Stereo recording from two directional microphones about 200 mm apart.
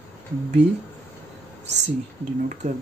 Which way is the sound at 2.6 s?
35° right (ahead or behind).